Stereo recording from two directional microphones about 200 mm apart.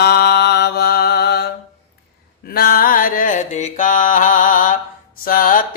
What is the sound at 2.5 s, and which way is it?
Mantra, 50° left (ahead or behind).